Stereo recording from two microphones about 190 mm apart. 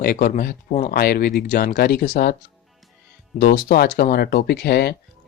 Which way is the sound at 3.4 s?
55° left (ahead or behind).